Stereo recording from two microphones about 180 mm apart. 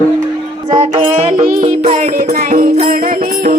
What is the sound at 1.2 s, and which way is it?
Music, 35° right (ahead or behind).